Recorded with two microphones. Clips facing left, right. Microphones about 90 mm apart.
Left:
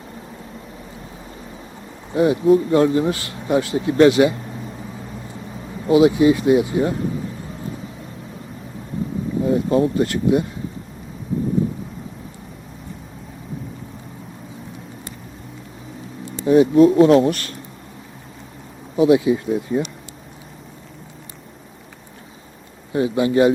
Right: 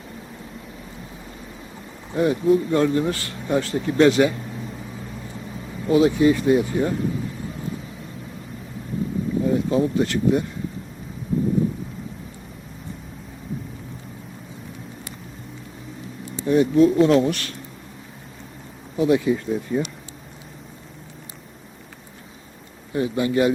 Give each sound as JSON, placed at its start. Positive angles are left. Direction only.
{"t": 2.1, "sound": "speech", "side_deg": 10}
{"t": 5.8, "sound": "speech", "side_deg": 10}
{"t": 9.4, "sound": "speech", "side_deg": 0}
{"t": 16.5, "sound": "speech", "side_deg": 5}
{"t": 18.9, "sound": "speech", "side_deg": 10}
{"t": 22.9, "sound": "a man's voice", "side_deg": 20}